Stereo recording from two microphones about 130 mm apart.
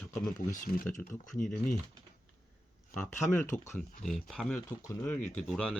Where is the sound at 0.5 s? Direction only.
80° left.